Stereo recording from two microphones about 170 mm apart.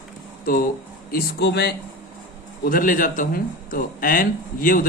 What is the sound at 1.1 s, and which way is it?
Speech, 75° left (ahead or behind).